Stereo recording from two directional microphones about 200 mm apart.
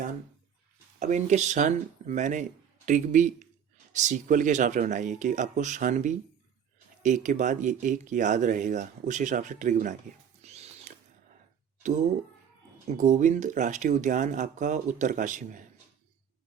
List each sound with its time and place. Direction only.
0.9 s speech: 35° right (ahead or behind)
10.4 s music: 35° right (ahead or behind)
11.8 s speech: 40° right (ahead or behind)